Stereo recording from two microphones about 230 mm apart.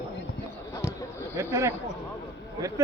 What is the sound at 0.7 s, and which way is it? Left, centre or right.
Basketball bounce, centre.